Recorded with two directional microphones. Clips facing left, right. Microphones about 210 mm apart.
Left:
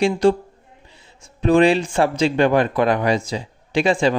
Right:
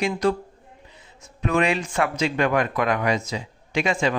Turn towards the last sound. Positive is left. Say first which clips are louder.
# left 5 dB
turn(degrees=30)  # may be behind; listen again after turning